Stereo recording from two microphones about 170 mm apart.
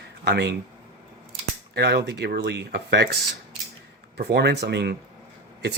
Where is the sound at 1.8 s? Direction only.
75° right (ahead or behind).